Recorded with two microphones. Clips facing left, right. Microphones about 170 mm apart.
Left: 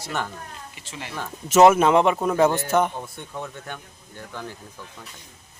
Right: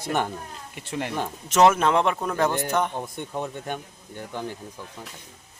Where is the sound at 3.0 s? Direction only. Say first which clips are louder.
Right 3 dB; 15° right (ahead or behind).